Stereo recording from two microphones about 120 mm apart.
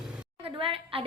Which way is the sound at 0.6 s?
50° right (ahead or behind).